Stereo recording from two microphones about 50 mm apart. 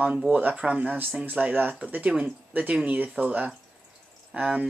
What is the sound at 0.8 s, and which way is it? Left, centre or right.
Speech, right.